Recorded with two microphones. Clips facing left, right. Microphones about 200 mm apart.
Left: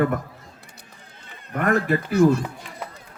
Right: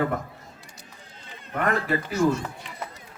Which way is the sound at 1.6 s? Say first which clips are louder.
Left 4 dB; 50° left (ahead or behind).